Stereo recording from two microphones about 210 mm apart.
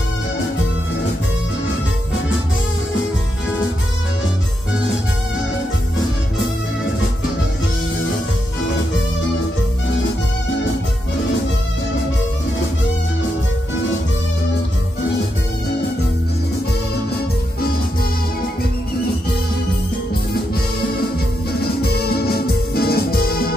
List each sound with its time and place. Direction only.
21.8 s music: 50° left (ahead or behind)